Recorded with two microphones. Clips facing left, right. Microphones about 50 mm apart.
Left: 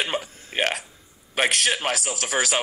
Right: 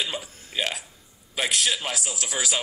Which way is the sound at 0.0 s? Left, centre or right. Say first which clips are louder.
Left 4 dB; left.